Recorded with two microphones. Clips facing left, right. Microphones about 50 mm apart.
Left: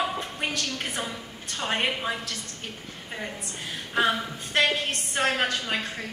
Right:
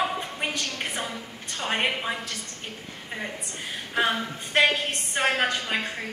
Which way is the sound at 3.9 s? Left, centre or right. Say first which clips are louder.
Left 1 dB; centre.